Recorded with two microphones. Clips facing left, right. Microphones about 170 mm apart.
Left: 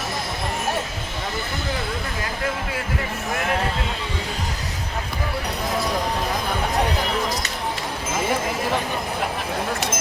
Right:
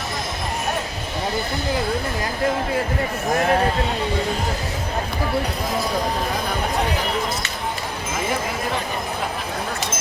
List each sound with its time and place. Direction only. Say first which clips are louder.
3.3 s a man's voice: right 6 dB; 35° right (ahead or behind)